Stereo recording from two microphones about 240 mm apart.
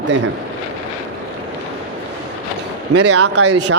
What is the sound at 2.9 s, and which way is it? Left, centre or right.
Speech, right.